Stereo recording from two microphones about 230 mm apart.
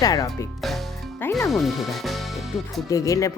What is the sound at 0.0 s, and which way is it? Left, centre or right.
Speech, centre.